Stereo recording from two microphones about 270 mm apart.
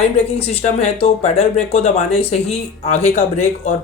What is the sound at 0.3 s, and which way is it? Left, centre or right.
Speech, left.